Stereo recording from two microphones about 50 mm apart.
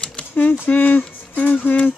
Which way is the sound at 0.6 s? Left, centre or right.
Left.